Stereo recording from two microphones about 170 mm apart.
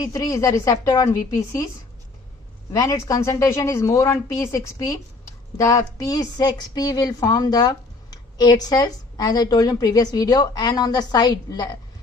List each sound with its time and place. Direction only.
0.0 s a woman's voice: 20° left (ahead or behind)
2.7 s a woman's voice: 20° left (ahead or behind)